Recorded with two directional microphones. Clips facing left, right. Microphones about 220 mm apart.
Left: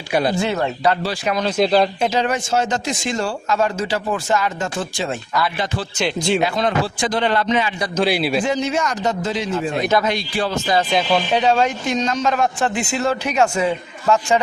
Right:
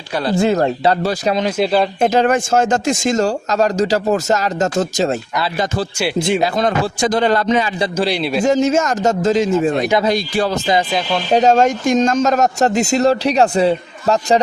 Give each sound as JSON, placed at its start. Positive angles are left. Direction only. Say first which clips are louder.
{"t": 0.1, "sound": "speech", "louder": "left 1 dB", "side_deg": 15}
{"t": 0.3, "sound": "speech", "louder": "right 6 dB", "side_deg": -40}
{"t": 1.5, "sound": "speech", "louder": "left 2 dB", "side_deg": -5}
{"t": 2.0, "sound": "speech", "louder": "right 6 dB", "side_deg": -50}
{"t": 6.4, "sound": "speech", "louder": "right 3 dB", "side_deg": -40}
{"t": 7.9, "sound": "speech", "louder": "left 2 dB", "side_deg": 5}
{"t": 8.4, "sound": "a man's voice", "louder": "right 6 dB", "side_deg": -45}